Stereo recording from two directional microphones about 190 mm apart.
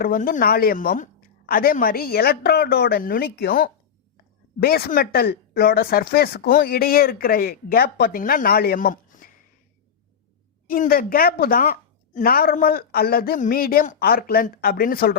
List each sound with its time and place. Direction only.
0.0 s speech: 50° left (ahead or behind)
10.7 s speech: 50° left (ahead or behind)